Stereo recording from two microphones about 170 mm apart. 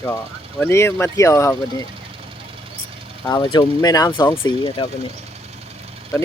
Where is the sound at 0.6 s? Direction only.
15° left (ahead or behind).